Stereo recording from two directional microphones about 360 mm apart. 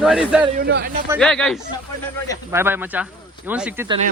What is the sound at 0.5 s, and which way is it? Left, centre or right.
Speech, right.